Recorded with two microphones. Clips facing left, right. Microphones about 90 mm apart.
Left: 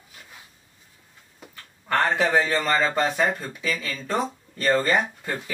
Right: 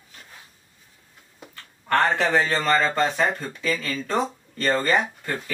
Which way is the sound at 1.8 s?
5° left (ahead or behind).